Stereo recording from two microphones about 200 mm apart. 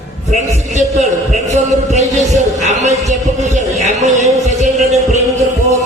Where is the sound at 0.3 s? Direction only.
35° right (ahead or behind).